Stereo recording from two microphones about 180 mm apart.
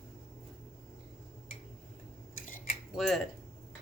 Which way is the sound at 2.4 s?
55° left (ahead or behind).